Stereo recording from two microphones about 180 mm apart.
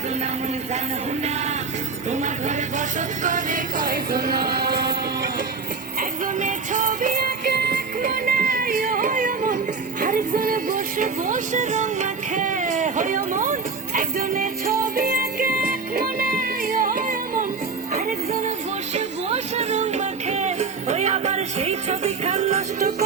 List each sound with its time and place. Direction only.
2.0 s a sound: 40° right (ahead or behind)
3.2 s music: 45° right (ahead or behind); by 4.9 s 60° right (ahead or behind)
6.0 s music: 45° right (ahead or behind)